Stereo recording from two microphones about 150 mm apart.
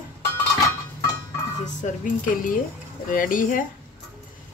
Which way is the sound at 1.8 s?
60° left (ahead or behind).